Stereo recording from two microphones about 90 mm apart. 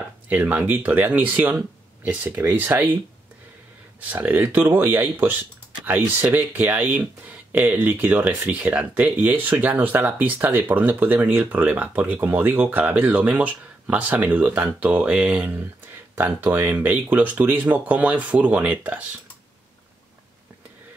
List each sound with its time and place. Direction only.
0.3 s speech: 20° right (ahead or behind)
4.1 s speech: 20° right (ahead or behind)